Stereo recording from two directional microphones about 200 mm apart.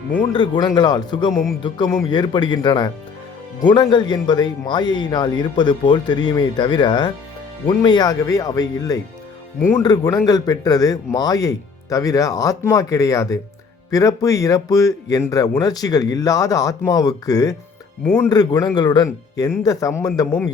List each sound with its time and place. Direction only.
0.3 s speech: 20° left (ahead or behind)
1.3 s speech: centre (ahead or behind)
1.6 s speech: 20° left (ahead or behind)
18.0 s speech: 5° left (ahead or behind)
18.3 s speech: 20° left (ahead or behind)